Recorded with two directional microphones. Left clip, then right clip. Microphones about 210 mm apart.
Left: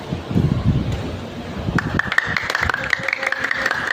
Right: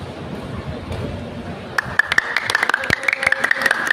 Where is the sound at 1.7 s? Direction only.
55° right (ahead or behind).